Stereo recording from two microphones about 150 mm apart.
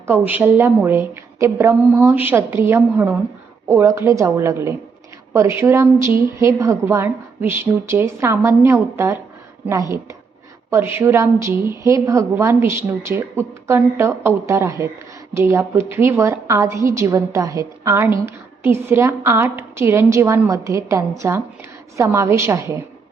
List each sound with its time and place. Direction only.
0.1 s a woman's voice: 10° right (ahead or behind)
10.7 s a woman's voice: 15° right (ahead or behind)